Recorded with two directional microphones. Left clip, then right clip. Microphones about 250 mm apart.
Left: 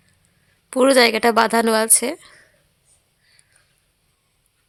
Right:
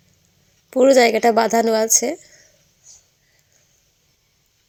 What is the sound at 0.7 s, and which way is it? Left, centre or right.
A woman's voice, centre.